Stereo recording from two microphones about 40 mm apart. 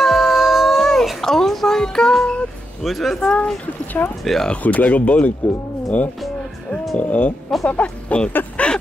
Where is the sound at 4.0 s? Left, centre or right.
Left.